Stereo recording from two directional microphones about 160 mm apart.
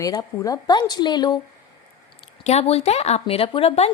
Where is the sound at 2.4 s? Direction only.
40° left (ahead or behind).